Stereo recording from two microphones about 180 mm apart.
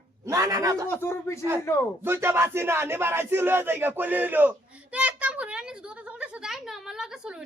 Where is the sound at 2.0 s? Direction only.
15° right (ahead or behind).